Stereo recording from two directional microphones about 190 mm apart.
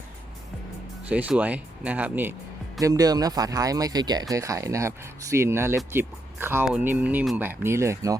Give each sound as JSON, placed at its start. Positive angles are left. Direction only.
{"t": 1.0, "sound": "speech", "side_deg": -5}